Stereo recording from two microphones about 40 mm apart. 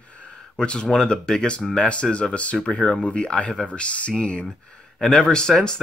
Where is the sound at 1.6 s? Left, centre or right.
Centre.